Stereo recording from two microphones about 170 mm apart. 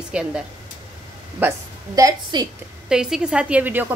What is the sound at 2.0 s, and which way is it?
Speech, 20° right (ahead or behind).